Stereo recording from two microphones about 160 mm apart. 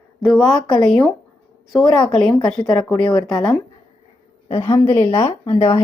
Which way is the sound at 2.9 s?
30° left (ahead or behind).